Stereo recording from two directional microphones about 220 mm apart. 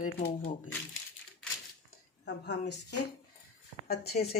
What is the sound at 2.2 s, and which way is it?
Speech, 50° left (ahead or behind).